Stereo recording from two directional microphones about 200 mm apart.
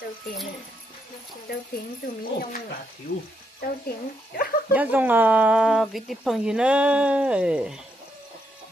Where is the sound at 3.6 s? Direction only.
50° left (ahead or behind).